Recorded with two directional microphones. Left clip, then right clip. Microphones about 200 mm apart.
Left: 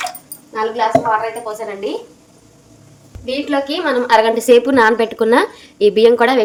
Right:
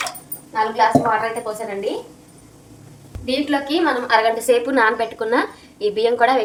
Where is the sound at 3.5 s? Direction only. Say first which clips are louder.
Left 2 dB; 60° left (ahead or behind); by 6.4 s 40° left (ahead or behind).